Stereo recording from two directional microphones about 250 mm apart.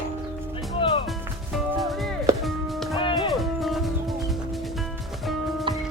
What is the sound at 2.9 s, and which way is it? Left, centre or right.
Music, centre.